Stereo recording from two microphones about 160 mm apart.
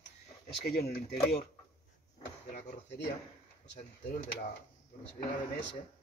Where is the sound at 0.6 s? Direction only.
75° left (ahead or behind).